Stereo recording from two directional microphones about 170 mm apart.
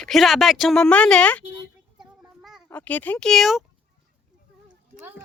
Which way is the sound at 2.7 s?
10° left (ahead or behind).